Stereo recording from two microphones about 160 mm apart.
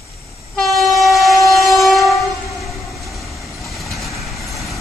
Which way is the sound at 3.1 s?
Centre (ahead or behind).